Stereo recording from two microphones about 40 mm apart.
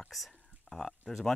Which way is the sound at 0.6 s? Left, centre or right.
Centre.